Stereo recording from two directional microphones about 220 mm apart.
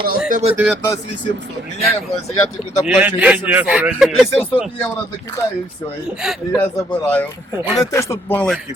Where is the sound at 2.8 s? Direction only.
5° right (ahead or behind).